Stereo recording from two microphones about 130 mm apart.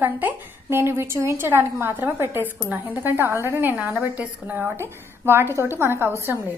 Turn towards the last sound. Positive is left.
turn(degrees=-15)  # may be behind; listen again after turning